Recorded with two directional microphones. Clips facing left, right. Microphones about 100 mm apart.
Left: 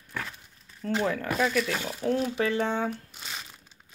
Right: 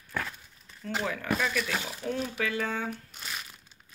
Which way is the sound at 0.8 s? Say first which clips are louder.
Left 5 dB; 40° left (ahead or behind).